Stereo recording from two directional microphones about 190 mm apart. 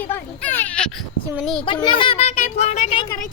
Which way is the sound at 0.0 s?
10° left (ahead or behind).